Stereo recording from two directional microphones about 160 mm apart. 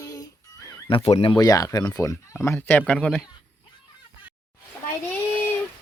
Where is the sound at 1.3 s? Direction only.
25° left (ahead or behind); by 3.2 s 5° left (ahead or behind).